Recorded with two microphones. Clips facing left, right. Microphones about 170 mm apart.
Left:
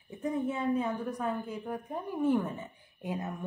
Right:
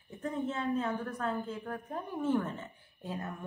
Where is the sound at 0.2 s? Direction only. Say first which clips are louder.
Left 3 dB; 10° left (ahead or behind).